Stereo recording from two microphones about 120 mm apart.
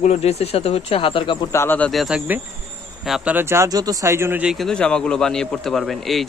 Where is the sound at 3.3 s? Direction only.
20° right (ahead or behind).